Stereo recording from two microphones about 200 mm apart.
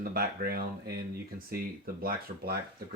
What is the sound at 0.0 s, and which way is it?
Speech, 50° right (ahead or behind).